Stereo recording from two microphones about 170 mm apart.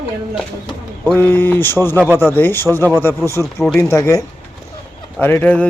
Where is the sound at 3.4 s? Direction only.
Centre (ahead or behind).